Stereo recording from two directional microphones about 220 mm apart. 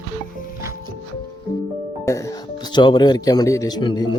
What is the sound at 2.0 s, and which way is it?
Speech, 15° left (ahead or behind).